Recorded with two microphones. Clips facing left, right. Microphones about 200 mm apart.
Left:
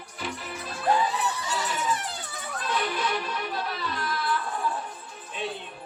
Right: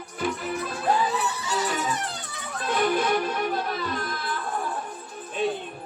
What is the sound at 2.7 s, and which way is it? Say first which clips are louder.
Music: right 6 dB; 50° right (ahead or behind).